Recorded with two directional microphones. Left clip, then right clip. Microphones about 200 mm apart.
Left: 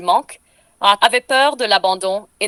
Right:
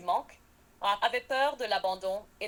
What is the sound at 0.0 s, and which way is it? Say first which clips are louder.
Speech: left 15 dB; 45° left (ahead or behind).